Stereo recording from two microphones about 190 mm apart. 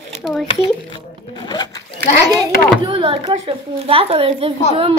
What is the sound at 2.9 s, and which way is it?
A woman's voice, 25° right (ahead or behind).